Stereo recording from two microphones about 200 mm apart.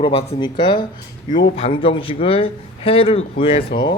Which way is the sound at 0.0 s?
30° left (ahead or behind).